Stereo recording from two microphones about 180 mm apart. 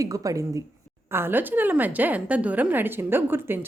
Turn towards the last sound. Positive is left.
turn(degrees=-10)  # may be behind; listen again after turning